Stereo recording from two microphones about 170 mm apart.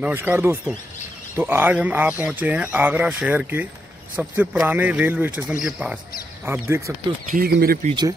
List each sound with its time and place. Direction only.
0.0 s speech: 10° right (ahead or behind)
7.2 s speech: 60° right (ahead or behind)